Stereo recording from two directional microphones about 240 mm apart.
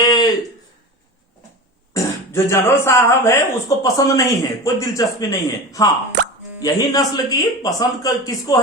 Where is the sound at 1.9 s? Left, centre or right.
Centre.